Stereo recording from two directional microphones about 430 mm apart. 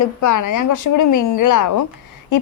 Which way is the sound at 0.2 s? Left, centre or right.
Left.